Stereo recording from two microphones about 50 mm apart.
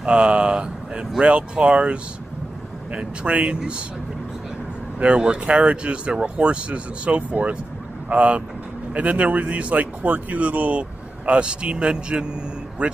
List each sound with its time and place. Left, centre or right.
0.0 s speech: right
5.0 s speech: right
12.8 s speech: right